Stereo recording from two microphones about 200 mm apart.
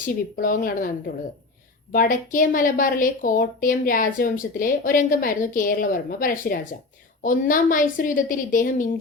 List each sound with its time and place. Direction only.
0.0 s a woman's voice: 45° left (ahead or behind)
1.9 s a woman's voice: 40° left (ahead or behind)